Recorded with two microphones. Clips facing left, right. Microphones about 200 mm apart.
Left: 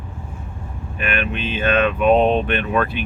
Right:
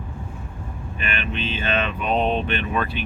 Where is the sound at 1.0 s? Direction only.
50° left (ahead or behind).